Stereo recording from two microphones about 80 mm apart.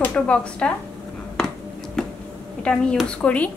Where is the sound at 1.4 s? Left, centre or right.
Centre.